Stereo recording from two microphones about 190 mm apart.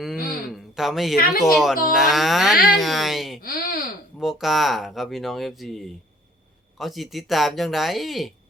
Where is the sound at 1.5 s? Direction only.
Centre (ahead or behind).